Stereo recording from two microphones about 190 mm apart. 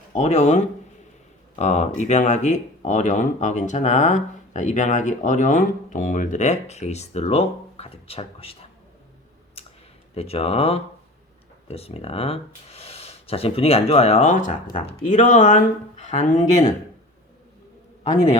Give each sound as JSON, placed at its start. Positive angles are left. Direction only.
{"t": 0.1, "sound": "speech", "side_deg": 35}
{"t": 10.2, "sound": "speech", "side_deg": 30}